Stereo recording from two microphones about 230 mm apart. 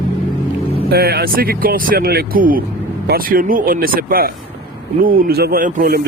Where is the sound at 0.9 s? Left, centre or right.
Right.